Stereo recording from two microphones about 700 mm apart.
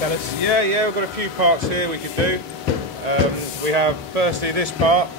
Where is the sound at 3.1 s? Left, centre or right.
Right.